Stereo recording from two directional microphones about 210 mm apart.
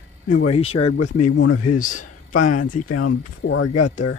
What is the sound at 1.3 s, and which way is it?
Speech, 60° left (ahead or behind).